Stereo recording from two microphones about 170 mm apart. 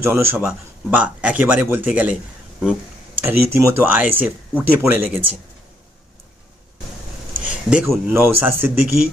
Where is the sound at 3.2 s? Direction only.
15° right (ahead or behind).